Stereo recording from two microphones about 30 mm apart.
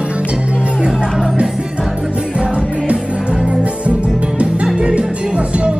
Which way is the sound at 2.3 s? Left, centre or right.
Right.